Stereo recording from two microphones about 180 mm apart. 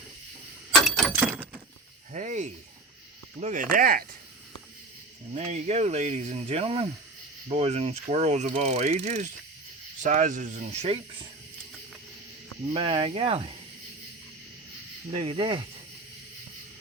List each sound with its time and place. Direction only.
0.7 s a sound: centre (ahead or behind)
2.1 s speech: 40° right (ahead or behind)
5.3 s speech: 40° right (ahead or behind)
12.7 s speech: 30° right (ahead or behind)
15.0 s speech: 35° right (ahead or behind)